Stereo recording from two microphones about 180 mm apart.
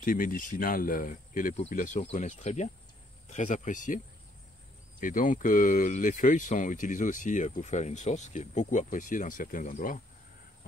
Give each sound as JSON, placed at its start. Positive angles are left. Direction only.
{"t": 0.0, "sound": "speech", "side_deg": 50}
{"t": 5.0, "sound": "speech", "side_deg": 45}